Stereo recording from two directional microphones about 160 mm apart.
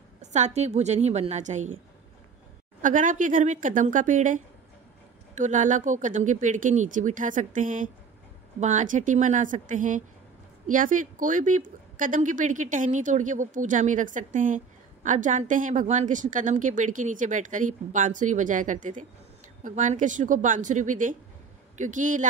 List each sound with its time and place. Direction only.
0.2 s a woman's voice: 45° right (ahead or behind)
2.8 s a woman's voice: 55° right (ahead or behind)